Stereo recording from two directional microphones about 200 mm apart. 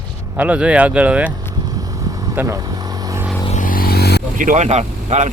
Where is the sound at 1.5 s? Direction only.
20° right (ahead or behind).